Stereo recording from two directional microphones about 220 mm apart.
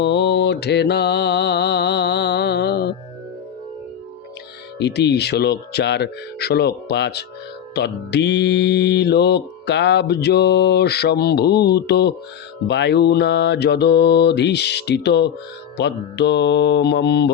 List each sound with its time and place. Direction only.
0.0 s mantra: 50° left (ahead or behind)
4.8 s mantra: 50° left (ahead or behind)